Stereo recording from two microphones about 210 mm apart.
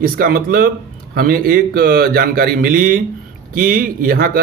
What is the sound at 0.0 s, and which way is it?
Speech, 45° right (ahead or behind).